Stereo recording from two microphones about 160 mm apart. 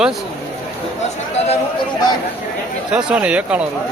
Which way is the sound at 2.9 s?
10° right (ahead or behind).